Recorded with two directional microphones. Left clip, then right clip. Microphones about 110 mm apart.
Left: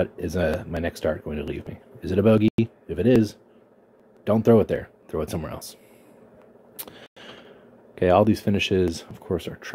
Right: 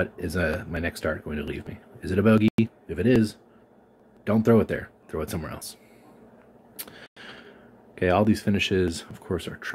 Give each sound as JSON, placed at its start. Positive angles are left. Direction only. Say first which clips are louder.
{"t": 0.0, "sound": "speech", "louder": "left 2 dB", "side_deg": 15}
{"t": 6.8, "sound": "speech", "louder": "even", "side_deg": 25}